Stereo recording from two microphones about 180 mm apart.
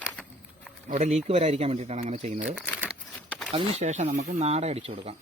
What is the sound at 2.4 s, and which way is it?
Crumpling, 5° right (ahead or behind).